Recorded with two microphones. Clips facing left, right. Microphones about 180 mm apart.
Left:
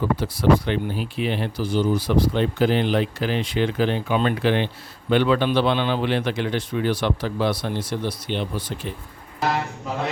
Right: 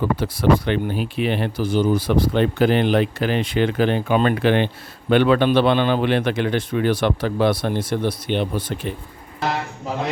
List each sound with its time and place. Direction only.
0.2 s speech: 60° right (ahead or behind)